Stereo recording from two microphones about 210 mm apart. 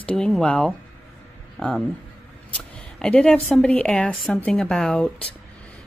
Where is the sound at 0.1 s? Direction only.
5° left (ahead or behind).